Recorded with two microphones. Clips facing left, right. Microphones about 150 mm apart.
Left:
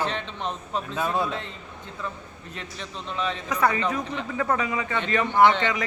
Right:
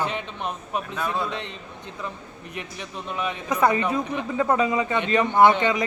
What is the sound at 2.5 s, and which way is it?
A man's voice, 15° right (ahead or behind).